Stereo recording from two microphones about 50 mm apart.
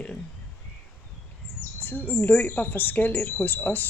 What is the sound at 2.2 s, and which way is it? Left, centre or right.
Speech, left.